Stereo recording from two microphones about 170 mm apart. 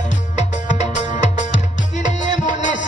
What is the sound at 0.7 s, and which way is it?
Music, 45° left (ahead or behind).